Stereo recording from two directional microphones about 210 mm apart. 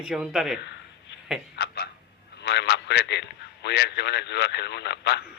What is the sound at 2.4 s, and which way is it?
A man's voice, 55° left (ahead or behind).